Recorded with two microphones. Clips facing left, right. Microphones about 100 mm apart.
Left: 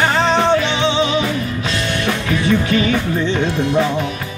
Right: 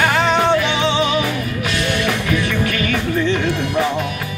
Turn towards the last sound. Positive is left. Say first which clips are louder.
# left 2 dB
turn(degrees=25)  # may be behind; listen again after turning